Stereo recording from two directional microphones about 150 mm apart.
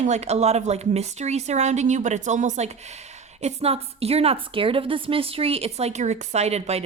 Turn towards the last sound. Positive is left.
turn(degrees=-45)  # may be behind; listen again after turning